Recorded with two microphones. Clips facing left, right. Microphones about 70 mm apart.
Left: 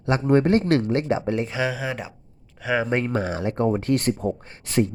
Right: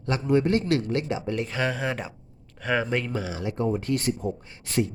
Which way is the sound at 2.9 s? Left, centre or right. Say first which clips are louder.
Left 4 dB; left.